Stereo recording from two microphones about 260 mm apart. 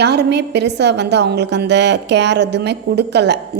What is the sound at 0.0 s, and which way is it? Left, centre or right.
A woman's voice, right.